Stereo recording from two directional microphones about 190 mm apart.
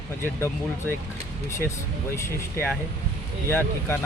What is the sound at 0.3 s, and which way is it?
Speech, 15° left (ahead or behind).